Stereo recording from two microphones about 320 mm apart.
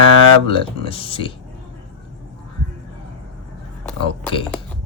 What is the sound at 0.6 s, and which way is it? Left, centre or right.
Speech, centre.